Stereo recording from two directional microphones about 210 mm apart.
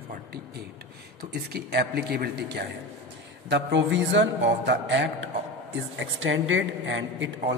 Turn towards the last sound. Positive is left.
turn(degrees=-60)  # may be behind; listen again after turning